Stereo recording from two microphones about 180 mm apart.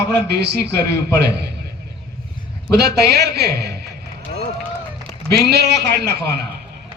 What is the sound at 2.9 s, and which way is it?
Speech, 65° right (ahead or behind).